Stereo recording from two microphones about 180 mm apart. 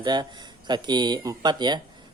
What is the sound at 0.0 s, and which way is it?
Speech, 25° right (ahead or behind).